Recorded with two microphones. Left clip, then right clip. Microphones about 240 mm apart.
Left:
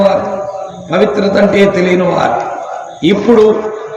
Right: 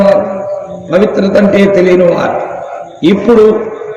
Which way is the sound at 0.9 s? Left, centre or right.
Left.